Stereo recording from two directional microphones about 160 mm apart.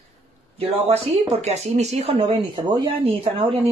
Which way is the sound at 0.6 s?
35° right (ahead or behind).